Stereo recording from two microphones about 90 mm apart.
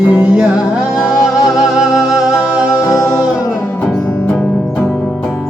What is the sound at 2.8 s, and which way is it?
Music, 35° left (ahead or behind).